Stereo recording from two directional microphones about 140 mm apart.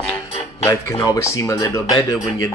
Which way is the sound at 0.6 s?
20° left (ahead or behind).